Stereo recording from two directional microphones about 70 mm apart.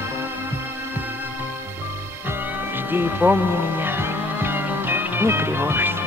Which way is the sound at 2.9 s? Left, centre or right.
Right.